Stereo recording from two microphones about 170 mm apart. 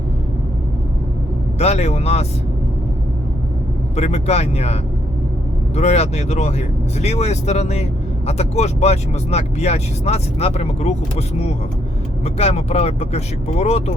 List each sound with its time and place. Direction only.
1.5 s speech: 40° left (ahead or behind)
3.9 s speech: 40° left (ahead or behind)
12.2 s speech: 40° left (ahead or behind)